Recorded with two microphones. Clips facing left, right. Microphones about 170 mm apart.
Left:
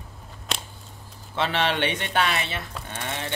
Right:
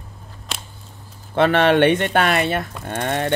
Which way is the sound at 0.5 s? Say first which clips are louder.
Left 1 dB; centre (ahead or behind).